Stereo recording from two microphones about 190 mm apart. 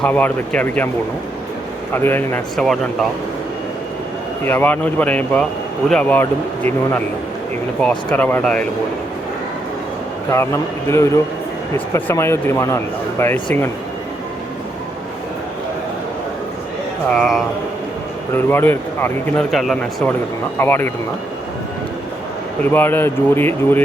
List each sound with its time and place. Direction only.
0.0 s speech: 5° left (ahead or behind)
1.9 s speech: 10° left (ahead or behind)
4.4 s speech: 10° left (ahead or behind)
10.3 s speech: 15° left (ahead or behind)
17.1 s speech: centre (ahead or behind)
19.5 s speech: centre (ahead or behind)
22.7 s speech: 10° left (ahead or behind)